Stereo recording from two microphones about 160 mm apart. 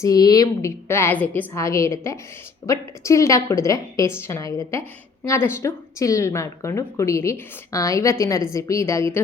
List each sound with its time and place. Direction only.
0.0 s a woman's voice: 25° left (ahead or behind)